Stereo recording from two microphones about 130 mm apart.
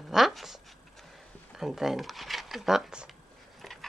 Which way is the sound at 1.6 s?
Centre (ahead or behind).